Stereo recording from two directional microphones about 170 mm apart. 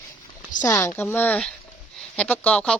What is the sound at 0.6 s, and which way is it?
Speech, 15° left (ahead or behind).